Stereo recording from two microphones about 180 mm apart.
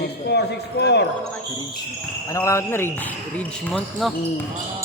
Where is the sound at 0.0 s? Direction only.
65° left (ahead or behind).